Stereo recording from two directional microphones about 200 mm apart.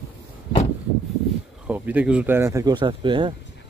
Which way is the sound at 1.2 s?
5° right (ahead or behind).